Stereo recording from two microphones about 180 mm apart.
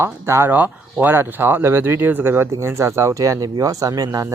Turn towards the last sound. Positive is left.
turn(degrees=-20)  # may be behind; listen again after turning